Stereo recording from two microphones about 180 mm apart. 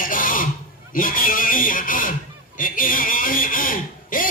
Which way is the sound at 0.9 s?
50° left (ahead or behind).